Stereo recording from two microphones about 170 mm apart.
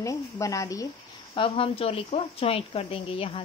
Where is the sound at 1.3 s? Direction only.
30° left (ahead or behind).